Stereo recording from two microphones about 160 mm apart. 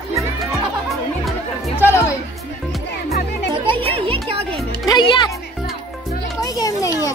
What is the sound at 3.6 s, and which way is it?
Music, 35° right (ahead or behind).